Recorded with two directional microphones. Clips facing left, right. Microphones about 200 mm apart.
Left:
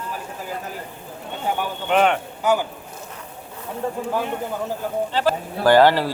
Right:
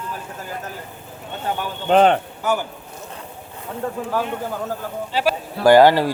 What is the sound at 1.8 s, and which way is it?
Speech, 35° right (ahead or behind).